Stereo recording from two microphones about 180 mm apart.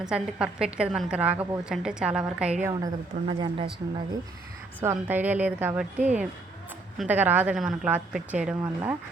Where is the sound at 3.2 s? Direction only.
30° right (ahead or behind).